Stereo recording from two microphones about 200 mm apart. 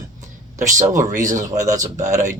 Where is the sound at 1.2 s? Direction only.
40° right (ahead or behind).